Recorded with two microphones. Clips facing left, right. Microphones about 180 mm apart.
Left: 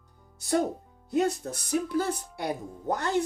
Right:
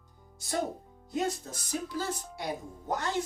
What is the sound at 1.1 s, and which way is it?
Music, 65° left (ahead or behind).